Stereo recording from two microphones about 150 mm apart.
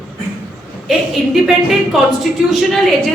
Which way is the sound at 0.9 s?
Centre (ahead or behind).